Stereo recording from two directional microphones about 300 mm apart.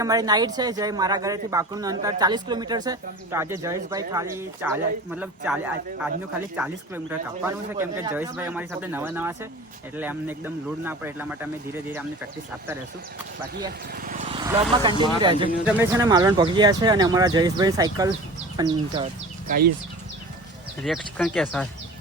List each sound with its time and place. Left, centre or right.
0.0 s speech: centre
13.9 s vehicle: right
15.0 s speech: centre
19.5 s speech: right
20.8 s speech: centre